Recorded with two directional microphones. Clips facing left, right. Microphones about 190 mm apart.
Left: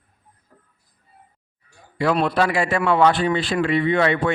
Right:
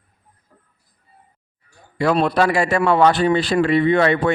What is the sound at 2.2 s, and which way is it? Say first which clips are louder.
A man's voice: right 3 dB; 40° right (ahead or behind).